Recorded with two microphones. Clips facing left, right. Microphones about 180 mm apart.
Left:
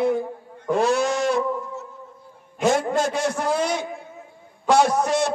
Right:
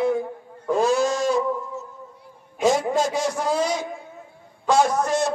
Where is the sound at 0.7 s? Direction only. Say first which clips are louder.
Even; 65° left (ahead or behind).